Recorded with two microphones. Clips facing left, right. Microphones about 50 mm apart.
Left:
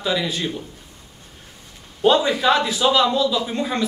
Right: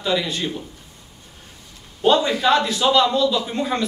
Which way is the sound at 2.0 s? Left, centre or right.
Centre.